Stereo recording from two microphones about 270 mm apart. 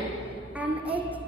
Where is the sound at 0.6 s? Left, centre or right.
Centre.